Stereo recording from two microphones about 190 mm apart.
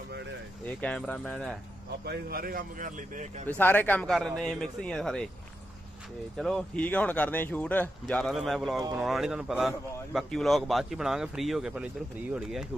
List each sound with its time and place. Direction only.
0.8 s speech: 5° left (ahead or behind)
2.0 s a man's voice: 50° right (ahead or behind)
3.4 s speech: 10° left (ahead or behind)
6.3 s speech: centre (ahead or behind)